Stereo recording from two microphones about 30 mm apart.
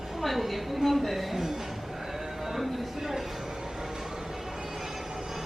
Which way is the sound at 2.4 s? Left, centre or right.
Centre.